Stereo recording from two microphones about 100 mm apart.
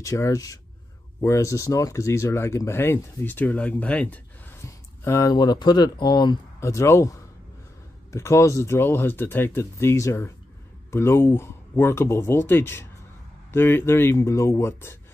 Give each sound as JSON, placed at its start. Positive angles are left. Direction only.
{"t": 0.0, "sound": "speech", "side_deg": 30}
{"t": 4.6, "sound": "a sound", "side_deg": 30}
{"t": 5.3, "sound": "speech", "side_deg": 45}
{"t": 6.6, "sound": "speech", "side_deg": 30}